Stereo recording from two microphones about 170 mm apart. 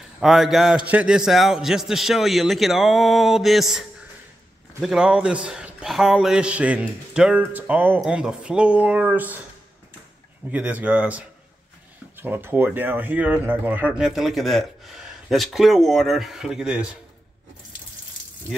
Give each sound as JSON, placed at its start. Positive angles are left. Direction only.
{"t": 0.2, "sound": "speech", "side_deg": 0}
{"t": 10.5, "sound": "speech", "side_deg": -10}